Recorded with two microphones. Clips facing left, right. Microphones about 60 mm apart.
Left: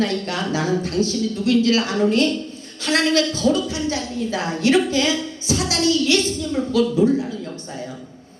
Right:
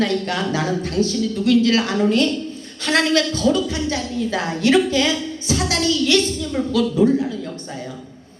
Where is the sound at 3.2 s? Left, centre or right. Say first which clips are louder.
Right 1 dB; right.